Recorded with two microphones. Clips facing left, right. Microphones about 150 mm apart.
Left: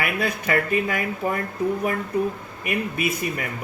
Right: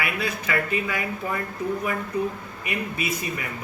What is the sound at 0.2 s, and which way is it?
Speech, 45° left (ahead or behind).